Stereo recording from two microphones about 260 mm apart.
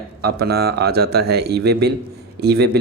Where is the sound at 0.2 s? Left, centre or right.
Right.